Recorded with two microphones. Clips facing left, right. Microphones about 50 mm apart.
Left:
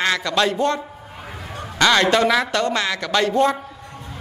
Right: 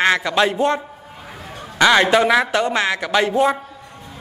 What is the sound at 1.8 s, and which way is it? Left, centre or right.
Speech, centre.